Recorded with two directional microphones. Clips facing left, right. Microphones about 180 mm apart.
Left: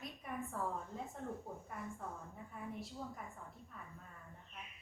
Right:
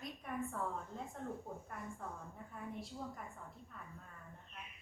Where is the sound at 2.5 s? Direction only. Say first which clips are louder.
Even; centre (ahead or behind).